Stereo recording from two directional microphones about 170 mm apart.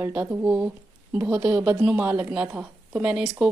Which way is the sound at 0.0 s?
10° right (ahead or behind).